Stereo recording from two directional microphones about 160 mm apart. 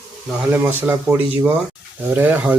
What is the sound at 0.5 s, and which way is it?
Speech, 10° right (ahead or behind).